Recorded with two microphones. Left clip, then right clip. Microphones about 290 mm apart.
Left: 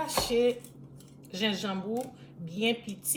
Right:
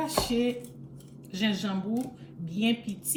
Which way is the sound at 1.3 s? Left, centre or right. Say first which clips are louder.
Even; centre.